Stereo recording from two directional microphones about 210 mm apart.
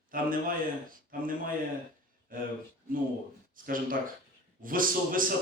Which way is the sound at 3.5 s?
40° right (ahead or behind).